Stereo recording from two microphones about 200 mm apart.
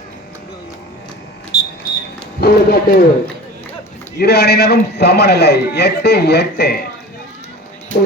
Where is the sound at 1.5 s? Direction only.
35° right (ahead or behind).